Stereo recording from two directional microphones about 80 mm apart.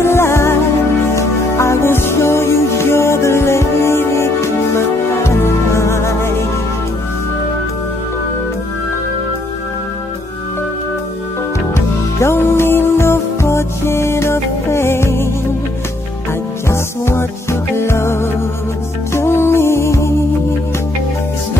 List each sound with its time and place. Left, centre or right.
0.0 s music: left
11.7 s music: left
16.6 s music: left